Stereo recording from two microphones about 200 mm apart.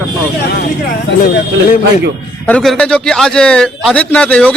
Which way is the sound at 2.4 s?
5° left (ahead or behind).